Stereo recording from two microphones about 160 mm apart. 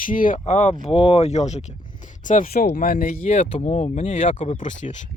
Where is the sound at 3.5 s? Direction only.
40° left (ahead or behind).